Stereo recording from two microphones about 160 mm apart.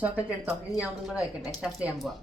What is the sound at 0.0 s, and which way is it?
Speech, 10° right (ahead or behind).